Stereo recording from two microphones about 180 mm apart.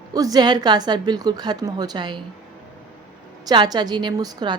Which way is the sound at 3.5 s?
25° right (ahead or behind).